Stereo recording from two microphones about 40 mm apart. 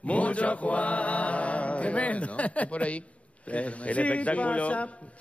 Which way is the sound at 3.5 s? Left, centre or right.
Left.